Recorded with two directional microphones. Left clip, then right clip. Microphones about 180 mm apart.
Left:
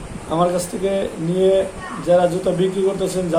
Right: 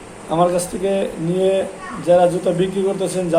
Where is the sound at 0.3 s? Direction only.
10° right (ahead or behind).